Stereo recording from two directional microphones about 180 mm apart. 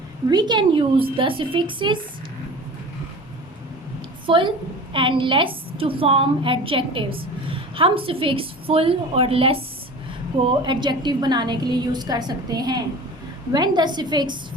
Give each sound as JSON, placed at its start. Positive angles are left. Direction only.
{"t": 0.3, "sound": "a woman's voice", "side_deg": -25}
{"t": 4.3, "sound": "a woman's voice", "side_deg": -30}
{"t": 10.6, "sound": "a woman's voice", "side_deg": -25}